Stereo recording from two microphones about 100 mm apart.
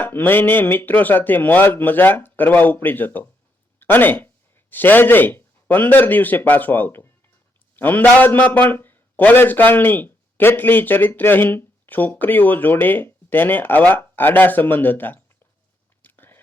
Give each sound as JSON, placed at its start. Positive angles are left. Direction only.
{"t": 0.0, "sound": "a man's voice", "side_deg": 20}
{"t": 16.0, "sound": "whispering", "side_deg": 20}